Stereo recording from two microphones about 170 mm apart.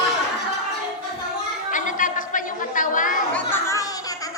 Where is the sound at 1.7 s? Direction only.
50° left (ahead or behind).